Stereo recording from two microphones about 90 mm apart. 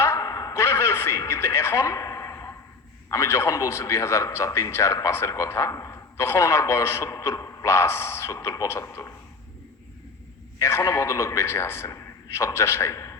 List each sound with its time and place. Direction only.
0.0 s a sound: 35° left (ahead or behind)
3.1 s a man's voice: 35° left (ahead or behind)
10.6 s a man's voice: 30° left (ahead or behind)